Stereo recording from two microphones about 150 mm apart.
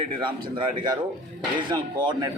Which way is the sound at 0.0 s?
35° right (ahead or behind).